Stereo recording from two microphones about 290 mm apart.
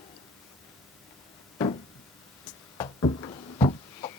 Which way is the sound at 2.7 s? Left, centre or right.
Centre.